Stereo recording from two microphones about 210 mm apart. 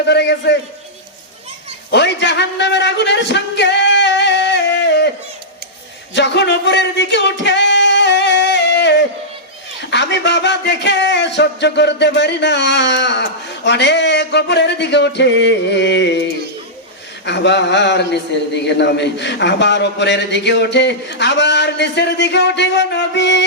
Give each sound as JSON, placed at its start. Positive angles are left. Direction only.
{"t": 0.1, "sound": "a man's voice", "side_deg": 55}
{"t": 1.9, "sound": "a man's voice", "side_deg": 55}
{"t": 6.1, "sound": "music", "side_deg": 55}
{"t": 9.9, "sound": "a man's voice", "side_deg": 55}
{"t": 17.2, "sound": "a man's voice", "side_deg": 55}